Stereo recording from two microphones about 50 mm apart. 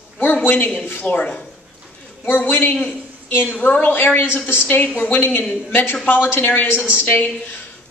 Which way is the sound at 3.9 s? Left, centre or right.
Left.